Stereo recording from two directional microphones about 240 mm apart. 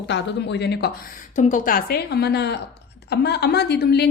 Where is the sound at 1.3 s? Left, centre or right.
Left.